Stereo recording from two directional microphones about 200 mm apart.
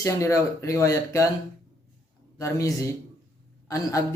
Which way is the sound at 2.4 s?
15° left (ahead or behind).